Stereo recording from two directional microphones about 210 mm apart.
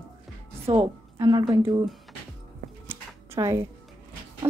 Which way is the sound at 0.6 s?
25° right (ahead or behind).